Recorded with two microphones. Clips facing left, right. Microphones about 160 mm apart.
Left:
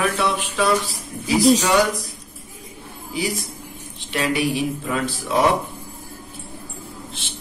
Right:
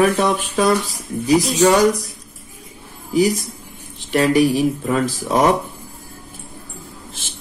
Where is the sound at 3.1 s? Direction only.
40° right (ahead or behind).